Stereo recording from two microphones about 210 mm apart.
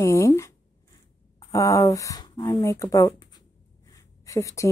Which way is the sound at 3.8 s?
15° left (ahead or behind).